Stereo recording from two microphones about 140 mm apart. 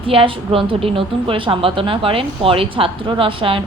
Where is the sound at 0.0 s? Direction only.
40° right (ahead or behind).